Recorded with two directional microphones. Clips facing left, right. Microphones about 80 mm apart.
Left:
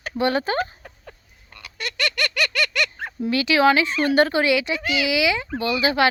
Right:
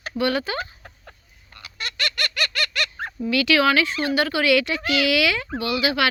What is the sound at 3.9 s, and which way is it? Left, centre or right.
Speech, left.